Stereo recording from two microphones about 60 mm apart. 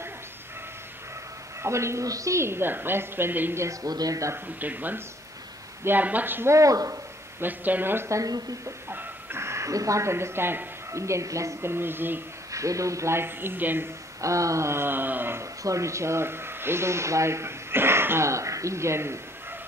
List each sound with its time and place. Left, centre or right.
1.6 s speech: right
2.0 s speech: right
2.4 s a woman's voice: right
3.8 s speech: right
4.6 s a woman's voice: right
6.5 s speech: right
7.3 s a woman's voice: right
8.1 s speech: right
8.6 s speech: right
10.9 s speech: right
11.7 s a woman's voice: right
12.5 s speech: right
14.2 s speech: right
15.6 s speech: right